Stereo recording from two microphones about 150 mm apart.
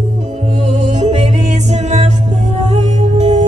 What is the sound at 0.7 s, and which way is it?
Music, 50° right (ahead or behind).